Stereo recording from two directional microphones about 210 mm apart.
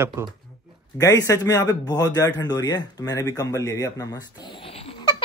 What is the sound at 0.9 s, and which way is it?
A man's voice, 15° left (ahead or behind).